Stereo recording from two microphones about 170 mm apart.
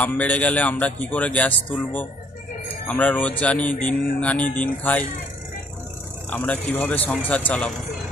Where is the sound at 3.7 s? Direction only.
55° left (ahead or behind).